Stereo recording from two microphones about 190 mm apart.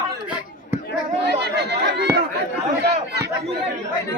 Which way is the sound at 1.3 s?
60° right (ahead or behind).